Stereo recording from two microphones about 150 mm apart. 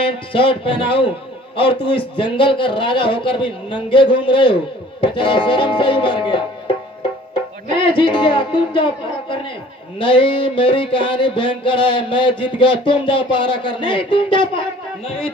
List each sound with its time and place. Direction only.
0.3 s a man's voice: 35° left (ahead or behind)
7.6 s a man's voice: 35° left (ahead or behind)
9.9 s a man's voice: 35° left (ahead or behind)